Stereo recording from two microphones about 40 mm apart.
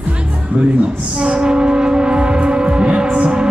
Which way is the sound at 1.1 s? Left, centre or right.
Right.